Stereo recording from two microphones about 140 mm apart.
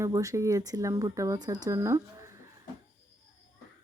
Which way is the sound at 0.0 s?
20° right (ahead or behind).